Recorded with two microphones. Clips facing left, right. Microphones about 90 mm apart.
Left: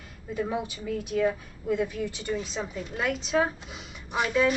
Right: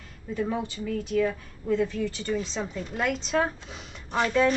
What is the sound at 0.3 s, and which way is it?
Speech, 15° left (ahead or behind).